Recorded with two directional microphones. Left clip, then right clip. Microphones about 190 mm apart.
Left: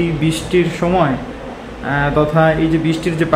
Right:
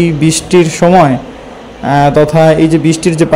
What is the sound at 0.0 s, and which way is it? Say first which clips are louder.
A man's voice: right 7 dB; 30° right (ahead or behind).